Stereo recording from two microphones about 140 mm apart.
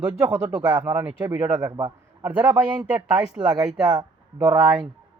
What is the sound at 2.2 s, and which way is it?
A man's voice, 15° right (ahead or behind).